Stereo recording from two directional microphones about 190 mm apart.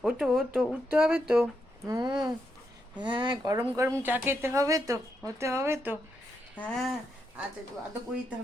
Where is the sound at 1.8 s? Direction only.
20° right (ahead or behind).